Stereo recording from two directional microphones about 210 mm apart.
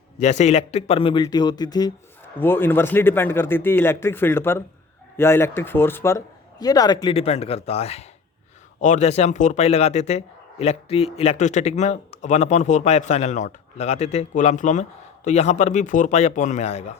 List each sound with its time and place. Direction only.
0.2 s a man's voice: 35° left (ahead or behind)